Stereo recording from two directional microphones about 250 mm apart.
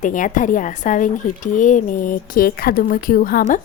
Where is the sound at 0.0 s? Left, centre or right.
Left.